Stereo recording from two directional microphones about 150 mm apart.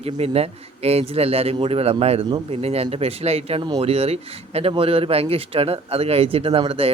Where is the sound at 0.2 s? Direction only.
45° right (ahead or behind).